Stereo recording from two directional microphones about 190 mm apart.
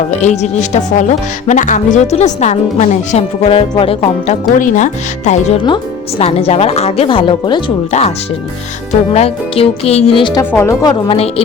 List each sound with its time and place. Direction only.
0.2 s speech: 35° left (ahead or behind)
4.6 s speech: 40° left (ahead or behind)
5.6 s speech: 30° left (ahead or behind)
7.9 s speech: 35° left (ahead or behind)
9.1 s speech: 30° left (ahead or behind)
10.5 s speech: 15° left (ahead or behind)
11.1 s speech: 30° left (ahead or behind)